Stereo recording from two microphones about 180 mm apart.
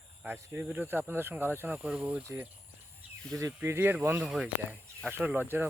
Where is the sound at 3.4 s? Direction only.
15° right (ahead or behind).